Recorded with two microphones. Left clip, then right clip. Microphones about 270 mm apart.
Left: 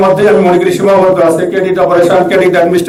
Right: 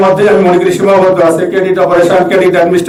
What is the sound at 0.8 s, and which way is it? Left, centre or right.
Speech, centre.